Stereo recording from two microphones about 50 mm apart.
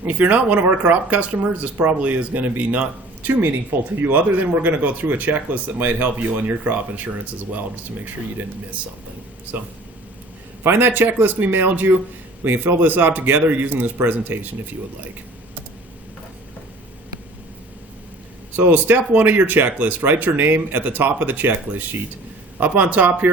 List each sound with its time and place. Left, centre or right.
0.0 s speech: right
9.5 s speech: right
18.5 s speech: right